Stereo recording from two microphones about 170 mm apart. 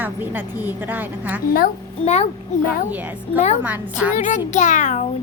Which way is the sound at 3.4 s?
40° left (ahead or behind).